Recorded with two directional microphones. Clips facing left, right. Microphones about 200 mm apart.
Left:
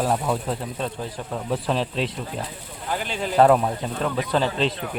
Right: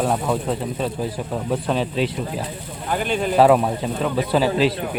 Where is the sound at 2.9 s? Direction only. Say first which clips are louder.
Right 5 dB; 55° right (ahead or behind).